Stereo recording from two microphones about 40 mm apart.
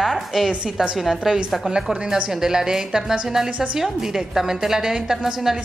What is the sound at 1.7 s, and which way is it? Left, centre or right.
Speech, right.